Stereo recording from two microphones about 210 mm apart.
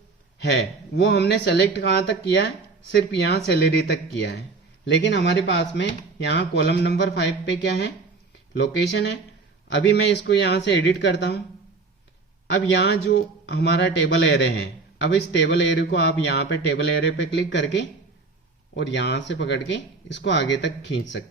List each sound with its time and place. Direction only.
0.4 s a man's voice: 55° left (ahead or behind)
12.5 s a man's voice: 55° left (ahead or behind)